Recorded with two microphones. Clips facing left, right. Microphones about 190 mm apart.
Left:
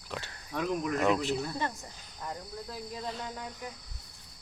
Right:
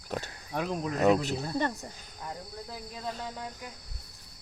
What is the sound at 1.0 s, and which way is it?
Speech, 40° right (ahead or behind).